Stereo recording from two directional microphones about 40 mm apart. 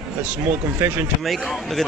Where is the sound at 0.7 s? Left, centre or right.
Right.